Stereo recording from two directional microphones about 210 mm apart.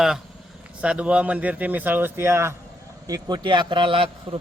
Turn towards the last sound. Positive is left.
turn(degrees=-25)  # may be behind; listen again after turning